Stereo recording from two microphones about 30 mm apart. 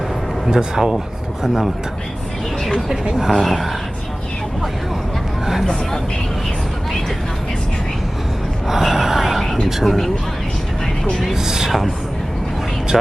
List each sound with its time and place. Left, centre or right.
0.5 s speech: centre
3.2 s speech: centre
8.6 s gasp: centre
9.8 s speech: centre
11.3 s speech: centre